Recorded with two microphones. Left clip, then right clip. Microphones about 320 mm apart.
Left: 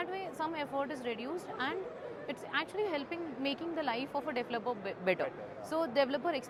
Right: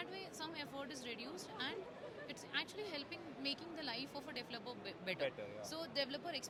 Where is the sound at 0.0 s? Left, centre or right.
Centre.